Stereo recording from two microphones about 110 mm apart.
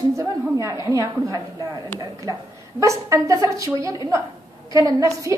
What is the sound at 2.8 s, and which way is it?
A woman's voice, 30° right (ahead or behind).